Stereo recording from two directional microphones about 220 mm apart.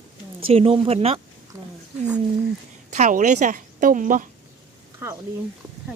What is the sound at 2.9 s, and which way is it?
A woman's voice, 35° right (ahead or behind).